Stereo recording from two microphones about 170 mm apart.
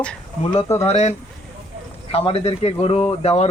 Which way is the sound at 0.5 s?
35° left (ahead or behind).